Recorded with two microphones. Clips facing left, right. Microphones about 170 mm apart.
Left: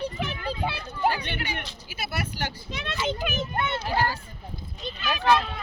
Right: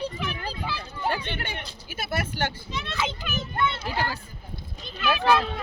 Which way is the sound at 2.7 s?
55° left (ahead or behind).